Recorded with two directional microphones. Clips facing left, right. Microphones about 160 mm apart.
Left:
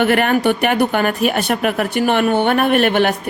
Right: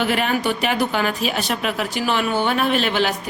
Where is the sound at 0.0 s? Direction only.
60° left (ahead or behind).